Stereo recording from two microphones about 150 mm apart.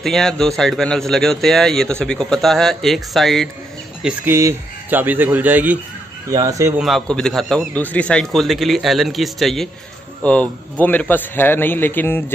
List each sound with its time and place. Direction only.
0.0 s a man's voice: centre (ahead or behind)
4.0 s speech: 15° right (ahead or behind)
6.3 s speech: 20° right (ahead or behind)
6.8 s a man's voice: centre (ahead or behind)